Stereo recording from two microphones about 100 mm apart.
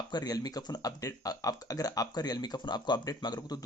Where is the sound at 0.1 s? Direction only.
40° left (ahead or behind).